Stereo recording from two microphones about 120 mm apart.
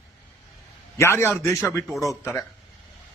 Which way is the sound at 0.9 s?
25° left (ahead or behind).